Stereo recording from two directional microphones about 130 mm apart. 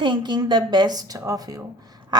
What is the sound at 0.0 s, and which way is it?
A woman's voice, 35° right (ahead or behind).